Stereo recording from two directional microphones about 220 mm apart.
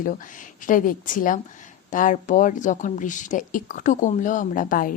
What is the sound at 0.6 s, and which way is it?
Speech, 35° left (ahead or behind).